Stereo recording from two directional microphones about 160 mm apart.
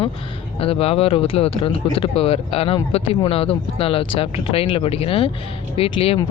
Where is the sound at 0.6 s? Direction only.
35° left (ahead or behind).